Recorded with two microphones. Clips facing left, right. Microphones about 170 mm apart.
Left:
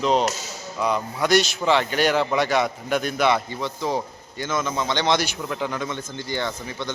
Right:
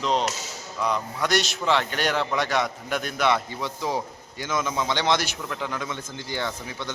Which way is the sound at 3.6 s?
10° right (ahead or behind).